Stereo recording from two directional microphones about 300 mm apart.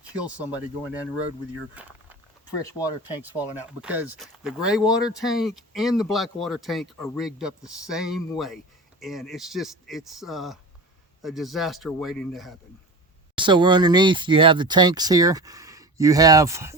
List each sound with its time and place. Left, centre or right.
0.0 s speech: centre
1.7 s a sound: centre
2.6 s speech: centre
3.2 s speech: centre
13.3 s speech: centre